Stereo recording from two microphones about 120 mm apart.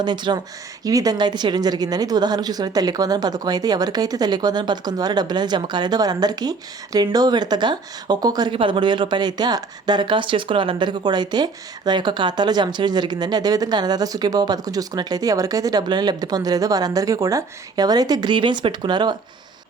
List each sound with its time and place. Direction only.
0.0 s a woman's voice: 40° right (ahead or behind)